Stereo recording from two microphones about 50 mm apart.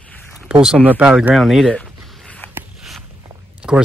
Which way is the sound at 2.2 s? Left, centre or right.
Left.